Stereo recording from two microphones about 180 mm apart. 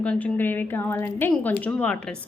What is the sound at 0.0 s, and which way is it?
A woman's voice, 5° left (ahead or behind).